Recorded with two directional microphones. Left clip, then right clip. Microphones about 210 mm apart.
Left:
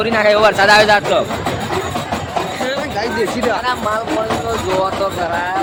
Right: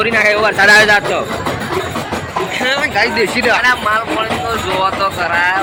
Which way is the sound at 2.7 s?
Centre (ahead or behind).